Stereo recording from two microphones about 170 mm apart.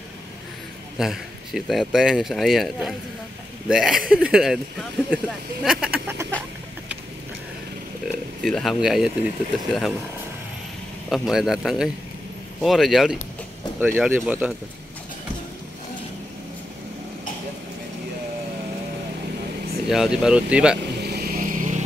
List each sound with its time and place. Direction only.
0.9 s speech: centre (ahead or behind)
8.4 s speech: centre (ahead or behind)
11.1 s speech: centre (ahead or behind)
19.9 s speech: 5° right (ahead or behind)
21.0 s vehicle: 70° right (ahead or behind); by 21.8 s 50° right (ahead or behind)